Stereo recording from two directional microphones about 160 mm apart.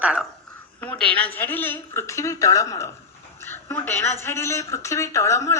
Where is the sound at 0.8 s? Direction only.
10° left (ahead or behind).